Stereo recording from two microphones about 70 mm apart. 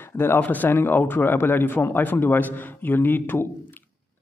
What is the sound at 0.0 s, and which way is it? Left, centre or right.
A man's voice, left.